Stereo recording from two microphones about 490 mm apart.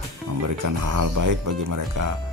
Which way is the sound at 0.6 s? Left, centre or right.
Right.